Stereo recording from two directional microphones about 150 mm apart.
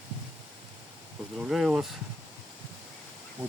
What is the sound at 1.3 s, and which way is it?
Speech, centre (ahead or behind).